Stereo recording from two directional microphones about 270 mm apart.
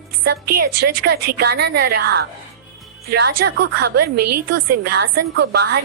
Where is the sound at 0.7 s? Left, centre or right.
Right.